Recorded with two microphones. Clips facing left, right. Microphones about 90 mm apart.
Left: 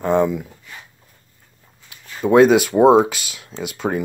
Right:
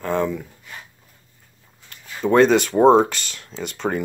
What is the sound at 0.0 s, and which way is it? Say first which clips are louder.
Speech: left 5 dB; 15° left (ahead or behind).